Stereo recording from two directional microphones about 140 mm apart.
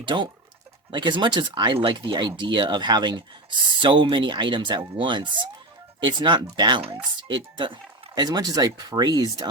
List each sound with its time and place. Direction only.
0.0 s speech: 35° right (ahead or behind)